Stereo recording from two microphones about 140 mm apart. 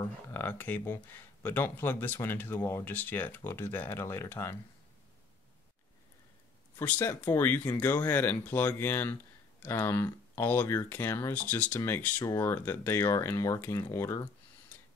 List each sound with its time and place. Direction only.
0.0 s speech: 15° left (ahead or behind)
6.8 s speech: 10° left (ahead or behind)